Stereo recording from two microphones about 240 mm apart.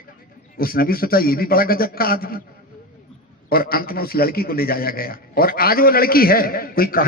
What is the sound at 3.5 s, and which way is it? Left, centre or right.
A man's voice, left.